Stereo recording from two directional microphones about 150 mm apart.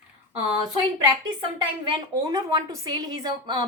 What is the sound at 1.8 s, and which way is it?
A woman's voice, 30° right (ahead or behind).